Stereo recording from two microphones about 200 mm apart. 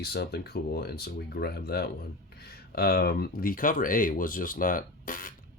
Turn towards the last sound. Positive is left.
turn(degrees=45)  # may be behind; listen again after turning